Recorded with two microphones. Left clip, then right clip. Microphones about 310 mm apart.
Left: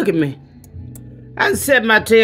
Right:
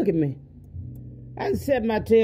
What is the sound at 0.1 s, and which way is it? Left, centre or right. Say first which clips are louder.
Speech: left 6 dB; centre.